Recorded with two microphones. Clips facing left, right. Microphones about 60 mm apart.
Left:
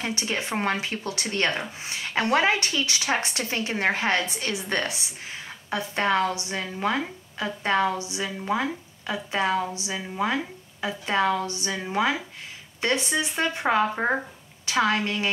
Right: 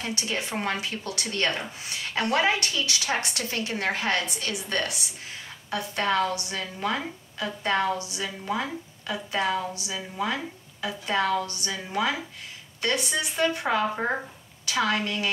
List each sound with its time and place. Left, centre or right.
0.0 s speech: left
13.9 s speech: centre
14.7 s speech: left